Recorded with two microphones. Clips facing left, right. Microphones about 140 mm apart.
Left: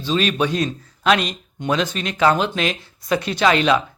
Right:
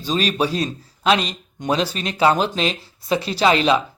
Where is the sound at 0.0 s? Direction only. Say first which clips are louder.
Left 1 dB; 40° right (ahead or behind).